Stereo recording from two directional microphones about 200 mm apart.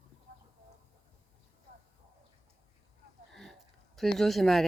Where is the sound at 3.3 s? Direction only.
Centre (ahead or behind).